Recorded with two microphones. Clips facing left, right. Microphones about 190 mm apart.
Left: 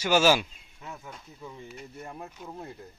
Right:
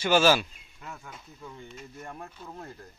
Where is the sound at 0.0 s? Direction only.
10° left (ahead or behind).